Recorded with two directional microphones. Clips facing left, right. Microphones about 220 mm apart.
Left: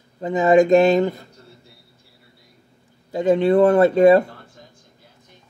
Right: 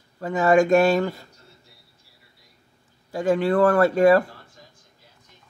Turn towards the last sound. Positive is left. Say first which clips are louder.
# left 4 dB
turn(degrees=20)  # may be behind; listen again after turning